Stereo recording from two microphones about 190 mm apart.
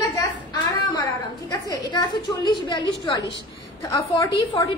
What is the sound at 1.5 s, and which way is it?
A woman's voice, 20° left (ahead or behind).